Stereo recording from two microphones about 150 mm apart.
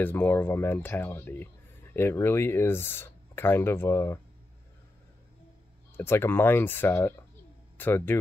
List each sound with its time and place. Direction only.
0.0 s speech: 10° left (ahead or behind)
5.9 s speech: 15° left (ahead or behind)